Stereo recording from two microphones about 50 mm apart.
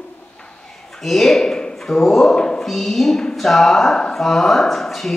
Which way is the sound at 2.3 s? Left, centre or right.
Centre.